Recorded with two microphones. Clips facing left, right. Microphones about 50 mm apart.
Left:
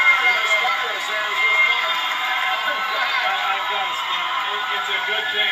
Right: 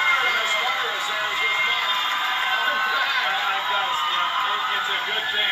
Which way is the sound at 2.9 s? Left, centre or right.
Left.